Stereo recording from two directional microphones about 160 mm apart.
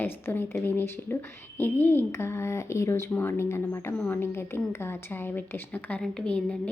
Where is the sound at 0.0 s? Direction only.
15° left (ahead or behind).